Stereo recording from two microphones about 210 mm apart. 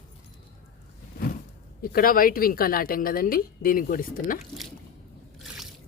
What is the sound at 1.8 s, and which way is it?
Speech, 45° left (ahead or behind).